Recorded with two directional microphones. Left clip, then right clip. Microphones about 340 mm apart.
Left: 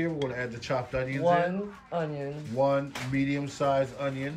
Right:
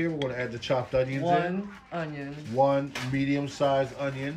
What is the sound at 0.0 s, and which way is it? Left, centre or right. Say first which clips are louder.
Speech: right 1 dB; centre.